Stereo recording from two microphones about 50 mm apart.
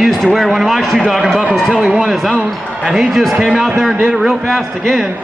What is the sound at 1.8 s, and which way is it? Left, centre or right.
Speech, centre.